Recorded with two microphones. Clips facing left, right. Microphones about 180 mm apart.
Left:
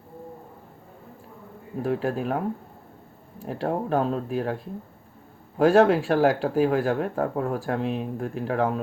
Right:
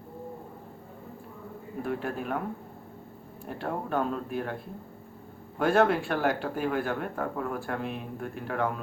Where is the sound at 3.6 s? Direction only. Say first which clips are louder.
Left 5 dB; 35° left (ahead or behind).